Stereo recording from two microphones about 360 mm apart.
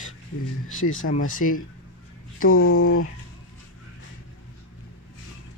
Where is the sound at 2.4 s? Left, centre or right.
Left.